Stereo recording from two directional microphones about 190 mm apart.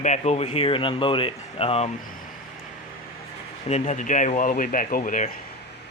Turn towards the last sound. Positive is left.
turn(degrees=45)  # may be behind; listen again after turning